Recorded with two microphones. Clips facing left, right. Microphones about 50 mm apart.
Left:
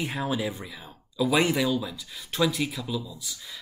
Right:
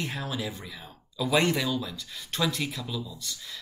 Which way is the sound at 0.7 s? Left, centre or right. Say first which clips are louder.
Left 5 dB; centre.